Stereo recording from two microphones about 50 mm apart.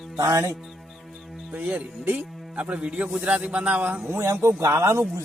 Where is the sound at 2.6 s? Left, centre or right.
Right.